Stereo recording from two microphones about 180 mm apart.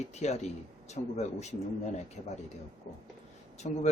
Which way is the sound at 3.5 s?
40° left (ahead or behind).